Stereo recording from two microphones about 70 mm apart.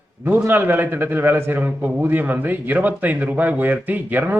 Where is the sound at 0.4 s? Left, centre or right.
Right.